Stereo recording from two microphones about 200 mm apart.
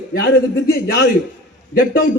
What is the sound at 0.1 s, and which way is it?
A man's voice, 60° left (ahead or behind).